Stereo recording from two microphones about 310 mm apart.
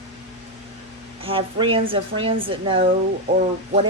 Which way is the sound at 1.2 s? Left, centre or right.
Centre.